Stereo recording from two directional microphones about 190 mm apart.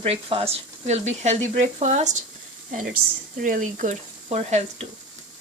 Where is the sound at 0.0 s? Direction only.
30° right (ahead or behind).